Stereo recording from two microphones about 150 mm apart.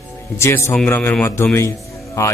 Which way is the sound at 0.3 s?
20° left (ahead or behind).